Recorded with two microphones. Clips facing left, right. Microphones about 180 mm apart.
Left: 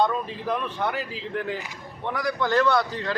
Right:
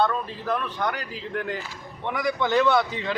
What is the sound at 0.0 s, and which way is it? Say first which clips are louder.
A man's voice: left 1 dB; 10° left (ahead or behind).